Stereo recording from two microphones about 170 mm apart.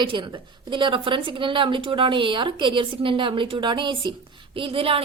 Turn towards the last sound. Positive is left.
turn(degrees=-35)  # may be behind; listen again after turning